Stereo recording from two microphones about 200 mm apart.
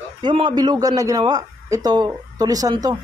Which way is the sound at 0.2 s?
25° right (ahead or behind).